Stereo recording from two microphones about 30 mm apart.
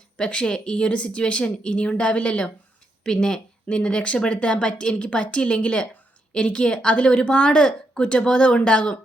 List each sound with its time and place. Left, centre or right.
0.2 s speech: left
0.9 s a woman's voice: left
3.0 s speech: left
3.7 s a woman's voice: left